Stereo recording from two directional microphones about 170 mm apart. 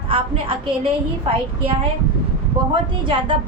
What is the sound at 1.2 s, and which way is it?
Speech, 30° right (ahead or behind).